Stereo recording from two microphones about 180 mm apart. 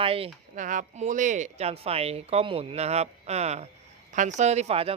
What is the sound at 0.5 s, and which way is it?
Speech, 45° right (ahead or behind).